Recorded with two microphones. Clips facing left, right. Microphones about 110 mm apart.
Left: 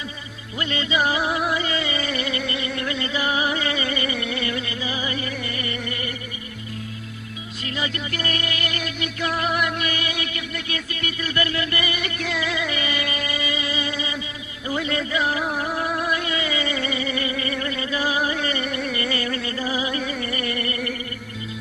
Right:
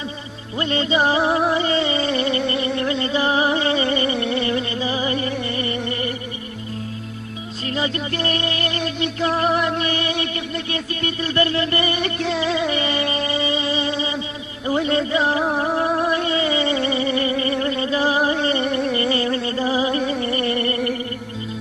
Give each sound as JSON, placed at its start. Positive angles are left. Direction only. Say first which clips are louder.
{"t": 0.6, "sound": "music", "louder": "right 4 dB", "side_deg": -35}
{"t": 7.7, "sound": "music", "louder": "right 5 dB", "side_deg": -35}
{"t": 20.1, "sound": "a sound", "louder": "right 6 dB", "side_deg": -30}